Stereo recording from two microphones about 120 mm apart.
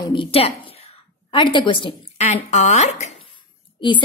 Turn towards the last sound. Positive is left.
turn(degrees=40)  # may be behind; listen again after turning